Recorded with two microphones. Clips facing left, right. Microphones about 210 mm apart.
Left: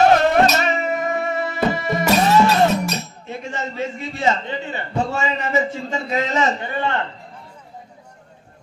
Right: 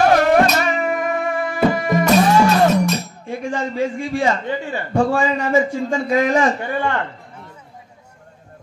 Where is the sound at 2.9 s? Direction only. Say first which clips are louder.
Right 4 dB; 25° left (ahead or behind).